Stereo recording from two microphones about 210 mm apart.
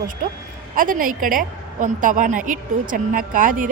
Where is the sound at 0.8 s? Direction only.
40° right (ahead or behind).